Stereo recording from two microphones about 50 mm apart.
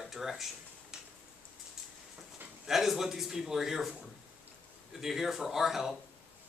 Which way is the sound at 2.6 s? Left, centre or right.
Centre.